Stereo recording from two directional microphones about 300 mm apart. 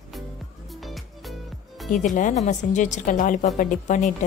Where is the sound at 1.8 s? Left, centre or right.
Left.